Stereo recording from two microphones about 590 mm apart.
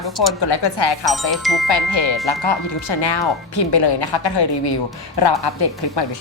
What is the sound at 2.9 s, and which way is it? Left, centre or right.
A woman's voice, left.